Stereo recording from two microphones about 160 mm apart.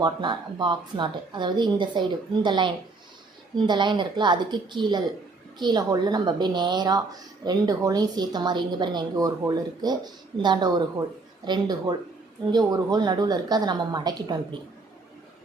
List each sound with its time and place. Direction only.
0.0 s a woman's voice: 30° right (ahead or behind)